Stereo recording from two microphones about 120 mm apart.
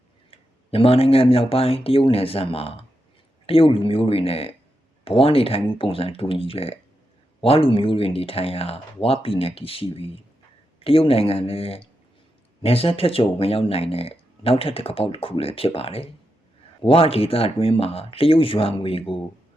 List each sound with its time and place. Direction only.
0.3 s speech: 50° left (ahead or behind)